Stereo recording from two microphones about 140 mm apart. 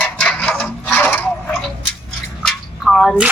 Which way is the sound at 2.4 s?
5° left (ahead or behind).